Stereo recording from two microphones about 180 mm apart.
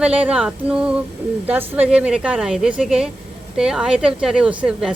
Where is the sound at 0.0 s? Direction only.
5° right (ahead or behind).